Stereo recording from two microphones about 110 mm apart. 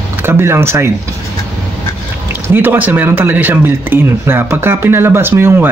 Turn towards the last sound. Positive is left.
turn(degrees=-20)  # may be behind; listen again after turning